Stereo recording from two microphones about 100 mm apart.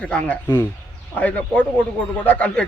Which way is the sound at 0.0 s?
10° left (ahead or behind).